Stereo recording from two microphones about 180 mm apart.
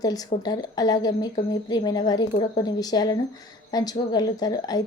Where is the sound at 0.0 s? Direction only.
20° left (ahead or behind).